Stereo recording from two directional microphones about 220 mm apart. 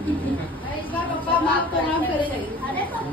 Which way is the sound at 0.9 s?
10° left (ahead or behind).